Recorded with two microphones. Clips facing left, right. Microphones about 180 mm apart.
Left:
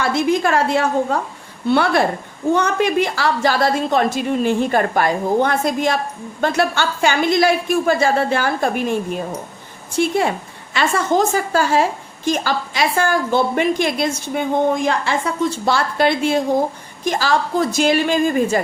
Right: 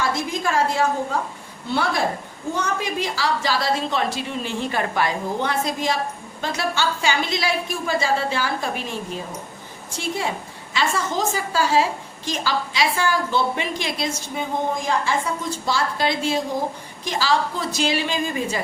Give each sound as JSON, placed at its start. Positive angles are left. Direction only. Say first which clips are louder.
{"t": 0.0, "sound": "a woman's voice", "louder": "left 7 dB", "side_deg": 65}
{"t": 10.0, "sound": "a woman's voice", "louder": "left 8 dB", "side_deg": 60}